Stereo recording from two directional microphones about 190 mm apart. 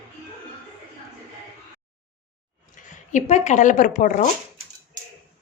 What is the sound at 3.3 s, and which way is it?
Speech, 40° left (ahead or behind).